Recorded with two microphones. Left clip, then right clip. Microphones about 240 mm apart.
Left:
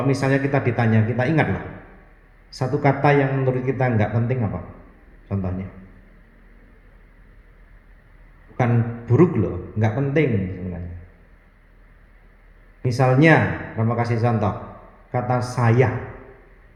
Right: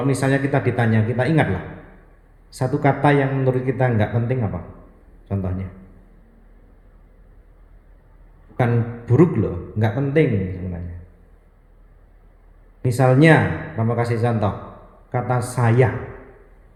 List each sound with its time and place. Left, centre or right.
0.0 s a man's voice: right
2.6 s a man's voice: right
8.5 s a man's voice: right
12.8 s a man's voice: right